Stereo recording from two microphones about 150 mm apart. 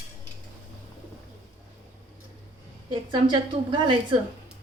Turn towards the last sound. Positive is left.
turn(degrees=-35)  # may be behind; listen again after turning